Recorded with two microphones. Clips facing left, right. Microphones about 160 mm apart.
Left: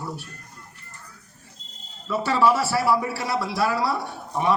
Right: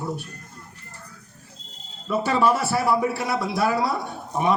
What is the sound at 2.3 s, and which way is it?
A man's voice, 20° right (ahead or behind).